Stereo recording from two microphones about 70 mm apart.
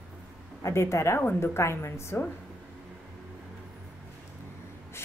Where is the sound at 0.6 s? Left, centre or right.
Left.